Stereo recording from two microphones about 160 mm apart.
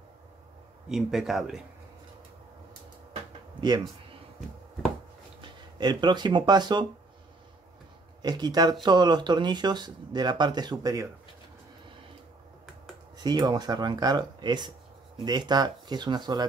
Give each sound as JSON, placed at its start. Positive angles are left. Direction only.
{"t": 0.8, "sound": "speech", "side_deg": -5}
{"t": 5.4, "sound": "speech", "side_deg": -30}
{"t": 8.2, "sound": "speech", "side_deg": -25}
{"t": 13.2, "sound": "speech", "side_deg": -25}